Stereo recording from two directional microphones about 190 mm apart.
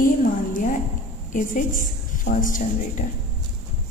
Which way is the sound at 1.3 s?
45° left (ahead or behind).